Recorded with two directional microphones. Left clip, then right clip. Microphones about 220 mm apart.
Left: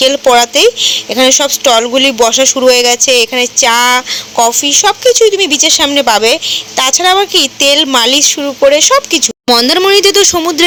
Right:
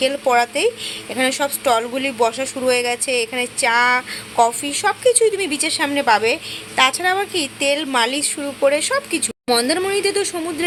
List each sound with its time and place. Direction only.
0.0 s speech: 30° left (ahead or behind)